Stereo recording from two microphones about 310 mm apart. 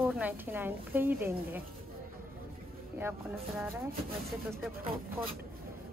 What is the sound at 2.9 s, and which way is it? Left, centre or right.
Speech, centre.